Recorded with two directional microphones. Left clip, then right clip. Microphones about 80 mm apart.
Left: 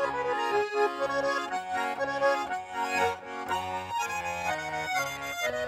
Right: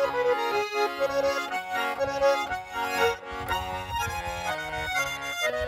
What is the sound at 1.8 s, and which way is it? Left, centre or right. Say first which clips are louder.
Accordion: right 3 dB; right.